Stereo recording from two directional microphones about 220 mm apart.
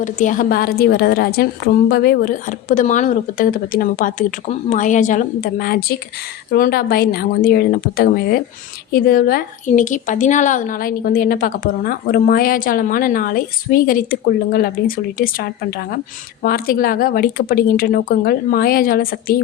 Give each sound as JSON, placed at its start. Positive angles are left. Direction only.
{"t": 0.0, "sound": "a woman's voice", "side_deg": 35}